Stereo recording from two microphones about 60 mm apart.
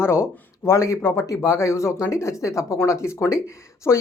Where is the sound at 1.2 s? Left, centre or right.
Left.